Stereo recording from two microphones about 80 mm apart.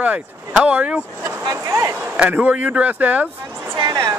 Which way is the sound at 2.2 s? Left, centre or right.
Centre.